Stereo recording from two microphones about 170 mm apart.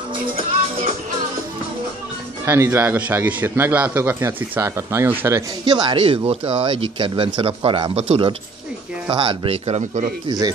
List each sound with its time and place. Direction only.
2.4 s a man's voice: 15° right (ahead or behind)
5.7 s speech: 25° right (ahead or behind)
10.2 s speech: 20° right (ahead or behind)